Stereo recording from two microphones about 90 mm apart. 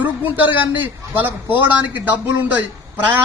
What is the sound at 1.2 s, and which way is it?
A man's voice, 20° right (ahead or behind).